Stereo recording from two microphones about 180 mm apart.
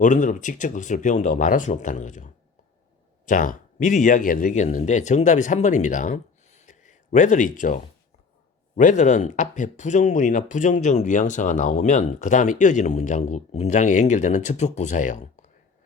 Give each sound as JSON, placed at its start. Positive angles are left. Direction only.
{"t": 0.0, "sound": "speech", "side_deg": 45}